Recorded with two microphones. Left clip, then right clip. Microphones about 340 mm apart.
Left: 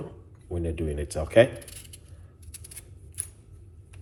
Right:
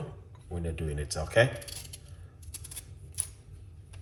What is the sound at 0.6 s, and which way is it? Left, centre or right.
Speech, centre.